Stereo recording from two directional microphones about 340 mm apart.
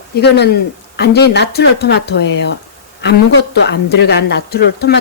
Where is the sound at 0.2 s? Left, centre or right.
Left.